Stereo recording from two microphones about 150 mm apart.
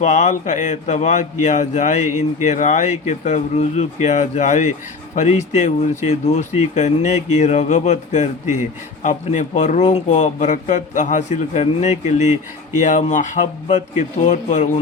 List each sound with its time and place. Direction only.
0.0 s speech: 50° left (ahead or behind)